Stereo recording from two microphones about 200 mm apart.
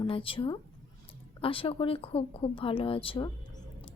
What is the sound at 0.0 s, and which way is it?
Speech, 25° left (ahead or behind).